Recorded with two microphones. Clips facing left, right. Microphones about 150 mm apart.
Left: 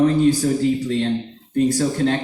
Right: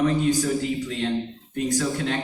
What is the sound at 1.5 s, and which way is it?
Speech, 35° left (ahead or behind).